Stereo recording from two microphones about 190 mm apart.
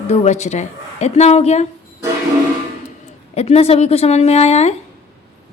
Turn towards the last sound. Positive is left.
turn(degrees=35)  # may be behind; listen again after turning